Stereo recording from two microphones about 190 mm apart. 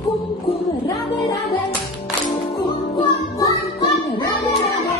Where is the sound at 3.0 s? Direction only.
20° left (ahead or behind).